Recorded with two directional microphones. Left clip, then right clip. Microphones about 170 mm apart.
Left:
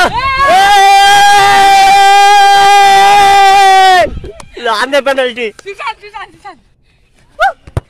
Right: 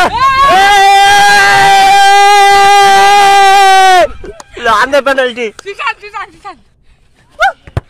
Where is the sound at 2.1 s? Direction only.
30° right (ahead or behind).